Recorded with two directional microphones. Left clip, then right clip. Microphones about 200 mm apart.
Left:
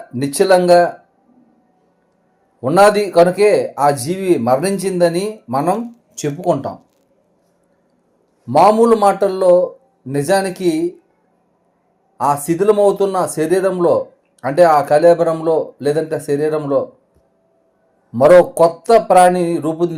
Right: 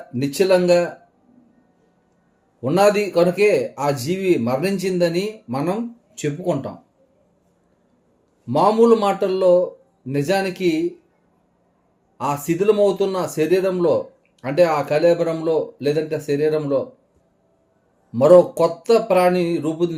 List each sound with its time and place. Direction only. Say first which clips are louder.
0.1 s speech: left 4 dB; centre (ahead or behind)
2.6 s speech: left 5 dB; centre (ahead or behind)
8.4 s speech: left 4 dB; centre (ahead or behind)
12.1 s speech: left 6 dB; centre (ahead or behind)
18.1 s speech: left 3 dB; centre (ahead or behind)